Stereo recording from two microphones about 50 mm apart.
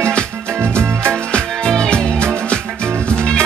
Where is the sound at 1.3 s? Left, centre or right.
Centre.